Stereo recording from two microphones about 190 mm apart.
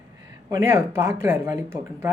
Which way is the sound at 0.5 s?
15° right (ahead or behind).